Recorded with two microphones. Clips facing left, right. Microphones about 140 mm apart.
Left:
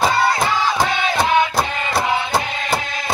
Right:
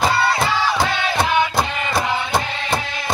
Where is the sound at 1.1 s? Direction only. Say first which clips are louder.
Left 2 dB; centre (ahead or behind).